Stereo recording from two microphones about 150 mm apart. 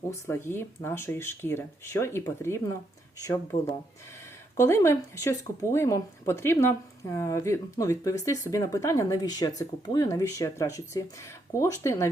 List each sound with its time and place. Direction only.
0.1 s speech: 15° left (ahead or behind)